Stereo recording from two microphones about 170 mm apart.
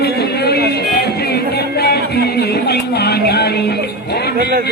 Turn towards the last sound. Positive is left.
turn(degrees=70)  # may be behind; listen again after turning